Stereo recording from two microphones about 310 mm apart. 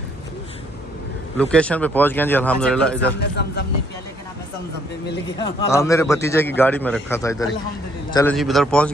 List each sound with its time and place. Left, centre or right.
1.4 s speech: centre
3.2 s speech: left
5.4 s a man's voice: centre